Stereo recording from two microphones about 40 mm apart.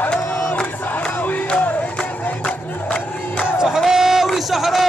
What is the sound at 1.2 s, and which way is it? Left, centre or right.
Crowd, left.